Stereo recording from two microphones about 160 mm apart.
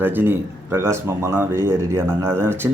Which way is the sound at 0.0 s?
10° right (ahead or behind).